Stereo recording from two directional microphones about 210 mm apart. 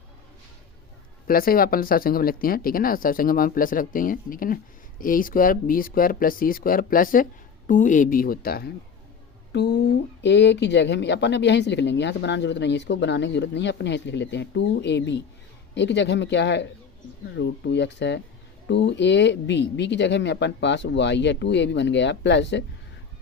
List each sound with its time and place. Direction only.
1.3 s speech: 45° left (ahead or behind)